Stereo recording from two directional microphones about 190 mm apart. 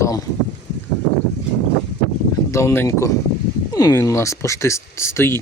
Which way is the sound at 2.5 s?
15° left (ahead or behind).